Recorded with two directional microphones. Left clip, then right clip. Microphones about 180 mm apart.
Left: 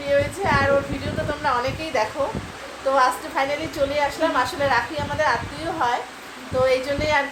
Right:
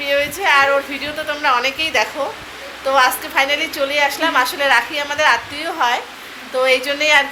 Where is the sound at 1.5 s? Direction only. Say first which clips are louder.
Right 8 dB; 15° right (ahead or behind).